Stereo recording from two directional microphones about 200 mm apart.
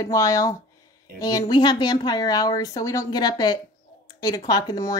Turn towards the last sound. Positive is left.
turn(degrees=20)  # may be behind; listen again after turning